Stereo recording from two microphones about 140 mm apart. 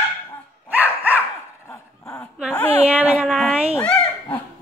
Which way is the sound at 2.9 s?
5° right (ahead or behind).